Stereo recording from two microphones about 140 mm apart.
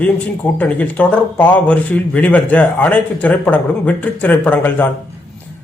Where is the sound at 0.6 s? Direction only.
10° left (ahead or behind).